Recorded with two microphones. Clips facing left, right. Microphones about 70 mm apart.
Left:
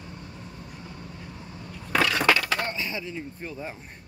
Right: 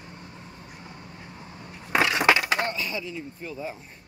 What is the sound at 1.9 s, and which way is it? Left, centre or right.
Crushing, right.